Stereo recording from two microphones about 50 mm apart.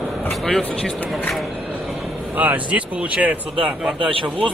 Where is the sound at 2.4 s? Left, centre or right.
Right.